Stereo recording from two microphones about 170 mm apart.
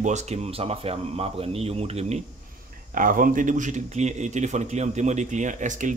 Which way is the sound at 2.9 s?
55° right (ahead or behind).